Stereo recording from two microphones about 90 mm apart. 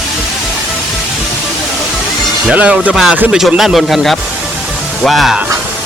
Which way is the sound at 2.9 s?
5° right (ahead or behind).